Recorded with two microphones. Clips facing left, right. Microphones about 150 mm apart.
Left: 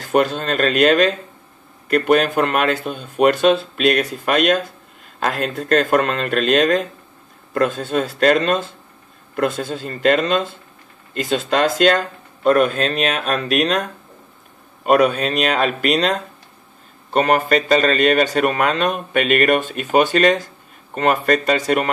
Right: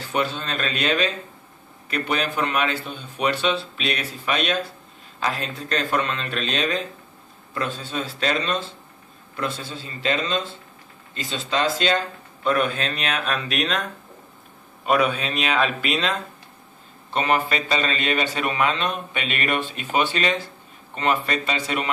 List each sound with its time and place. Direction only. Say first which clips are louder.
0.0 s a man's voice: left 8 dB; 50° left (ahead or behind)
14.9 s a man's voice: left 6 dB; 45° left (ahead or behind)